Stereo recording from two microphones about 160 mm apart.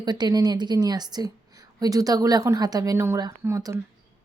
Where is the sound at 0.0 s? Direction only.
25° right (ahead or behind).